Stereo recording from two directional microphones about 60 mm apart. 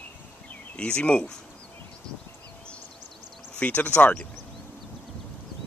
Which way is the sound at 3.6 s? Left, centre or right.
Left.